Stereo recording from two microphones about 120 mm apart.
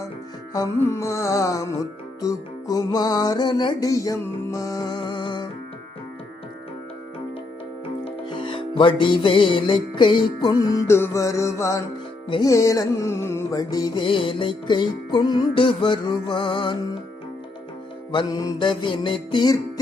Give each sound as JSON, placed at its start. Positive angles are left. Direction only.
{"t": 0.5, "sound": "music", "side_deg": 30}
{"t": 8.0, "sound": "music", "side_deg": 45}
{"t": 10.8, "sound": "music", "side_deg": 20}
{"t": 18.1, "sound": "music", "side_deg": 35}